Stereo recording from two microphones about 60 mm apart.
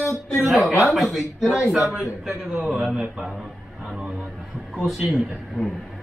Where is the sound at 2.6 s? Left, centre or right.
Centre.